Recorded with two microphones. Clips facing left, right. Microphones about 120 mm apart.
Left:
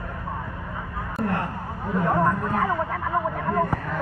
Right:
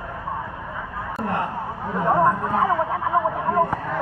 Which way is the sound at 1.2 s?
20° right (ahead or behind).